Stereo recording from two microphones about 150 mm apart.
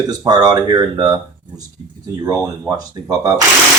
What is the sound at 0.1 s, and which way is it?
Speech, 25° right (ahead or behind).